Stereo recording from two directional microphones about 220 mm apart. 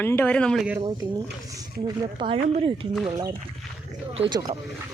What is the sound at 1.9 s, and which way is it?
A woman's voice, 25° right (ahead or behind).